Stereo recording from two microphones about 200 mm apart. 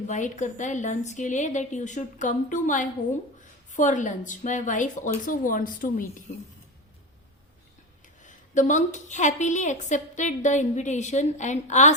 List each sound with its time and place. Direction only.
0.1 s a woman's voice: 40° left (ahead or behind)
8.2 s a woman's voice: 40° left (ahead or behind)